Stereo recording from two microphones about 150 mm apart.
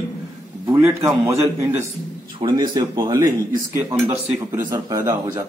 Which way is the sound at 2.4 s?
30° right (ahead or behind).